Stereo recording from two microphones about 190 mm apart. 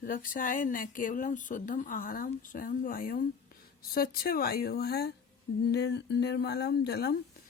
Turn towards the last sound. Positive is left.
turn(degrees=60)  # may be behind; listen again after turning